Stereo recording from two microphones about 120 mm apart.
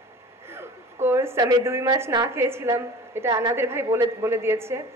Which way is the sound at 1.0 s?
20° right (ahead or behind).